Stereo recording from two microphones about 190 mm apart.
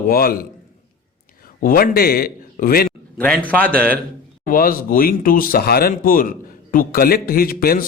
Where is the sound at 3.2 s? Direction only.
5° left (ahead or behind).